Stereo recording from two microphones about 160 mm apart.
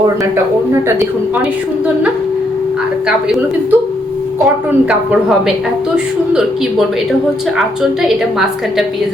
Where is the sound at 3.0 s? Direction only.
5° right (ahead or behind).